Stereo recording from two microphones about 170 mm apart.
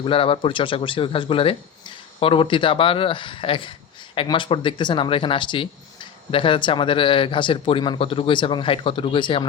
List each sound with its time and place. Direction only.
0.0 s speech: 30° left (ahead or behind)